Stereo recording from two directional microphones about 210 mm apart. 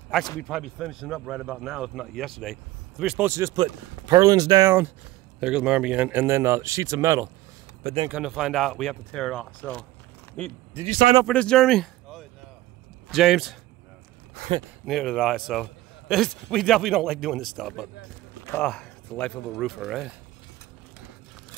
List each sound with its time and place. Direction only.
0.4 s speech: centre (ahead or behind)
8.1 s speech: 5° right (ahead or behind)
10.9 s speech: 45° right (ahead or behind)
11.2 s speech: 5° left (ahead or behind)
14.4 s speech: 55° right (ahead or behind)
14.9 s speech: centre (ahead or behind)